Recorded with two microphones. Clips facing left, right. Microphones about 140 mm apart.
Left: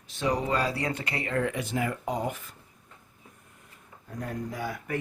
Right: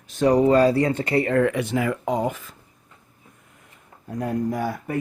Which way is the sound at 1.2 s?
60° right (ahead or behind).